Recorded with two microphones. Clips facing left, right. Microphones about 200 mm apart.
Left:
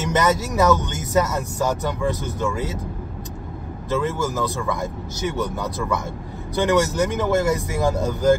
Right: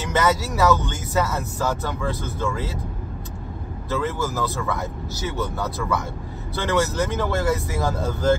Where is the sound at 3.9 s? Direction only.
15° left (ahead or behind).